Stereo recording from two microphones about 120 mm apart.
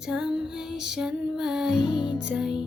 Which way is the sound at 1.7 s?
40° left (ahead or behind).